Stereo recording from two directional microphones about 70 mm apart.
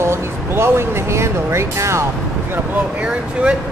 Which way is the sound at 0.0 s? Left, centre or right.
Right.